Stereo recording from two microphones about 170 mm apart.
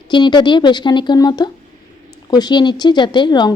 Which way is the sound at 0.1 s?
25° left (ahead or behind).